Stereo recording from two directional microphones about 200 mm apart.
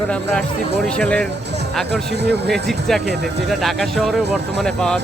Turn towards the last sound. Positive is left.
turn(degrees=5)  # may be behind; listen again after turning